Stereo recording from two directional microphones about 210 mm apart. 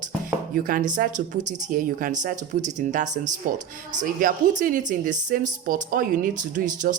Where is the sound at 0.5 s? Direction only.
40° right (ahead or behind).